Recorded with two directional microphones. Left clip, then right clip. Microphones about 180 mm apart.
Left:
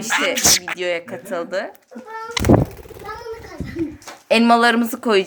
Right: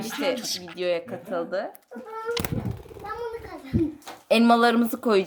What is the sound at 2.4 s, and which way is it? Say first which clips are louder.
Speech: left 17 dB; 20° left (ahead or behind).